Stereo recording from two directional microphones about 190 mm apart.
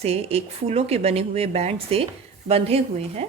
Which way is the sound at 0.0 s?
30° right (ahead or behind).